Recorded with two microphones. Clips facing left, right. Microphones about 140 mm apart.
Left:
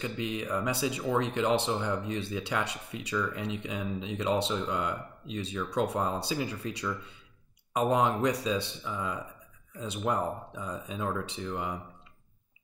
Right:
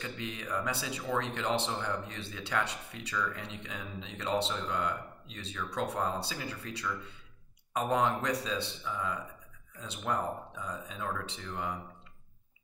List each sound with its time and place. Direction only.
0.0 s speech: 15° left (ahead or behind)